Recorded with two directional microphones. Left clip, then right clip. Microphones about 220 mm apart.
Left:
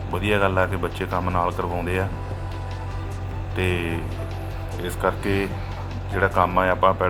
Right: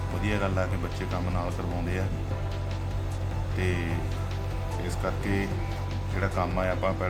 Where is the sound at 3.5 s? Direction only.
15° left (ahead or behind).